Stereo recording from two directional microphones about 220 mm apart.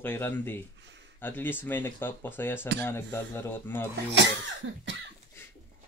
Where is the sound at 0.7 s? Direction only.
55° right (ahead or behind).